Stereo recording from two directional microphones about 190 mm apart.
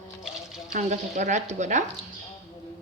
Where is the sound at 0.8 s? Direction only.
40° right (ahead or behind).